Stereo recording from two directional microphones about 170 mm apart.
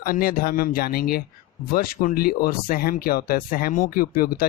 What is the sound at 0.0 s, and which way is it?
Speech, 60° left (ahead or behind).